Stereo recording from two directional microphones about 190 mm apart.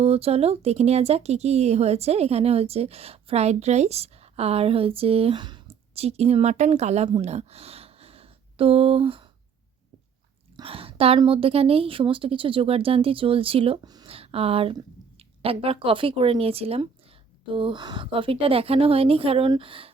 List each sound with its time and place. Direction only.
0.0 s speech: 30° right (ahead or behind)
10.6 s a woman's voice: 30° right (ahead or behind)